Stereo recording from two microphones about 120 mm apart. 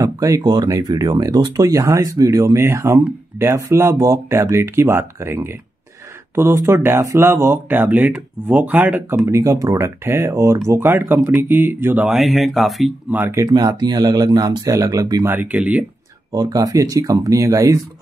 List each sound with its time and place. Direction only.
0.0 s speech: 25° right (ahead or behind)
9.1 s speech: 25° right (ahead or behind)
12.1 s speech: centre (ahead or behind)
13.3 s speech: 30° right (ahead or behind)
15.2 s speech: 15° right (ahead or behind)
16.3 s speech: 30° right (ahead or behind)